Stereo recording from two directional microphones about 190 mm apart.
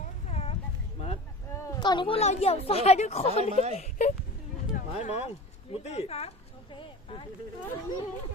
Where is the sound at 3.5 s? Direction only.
35° right (ahead or behind).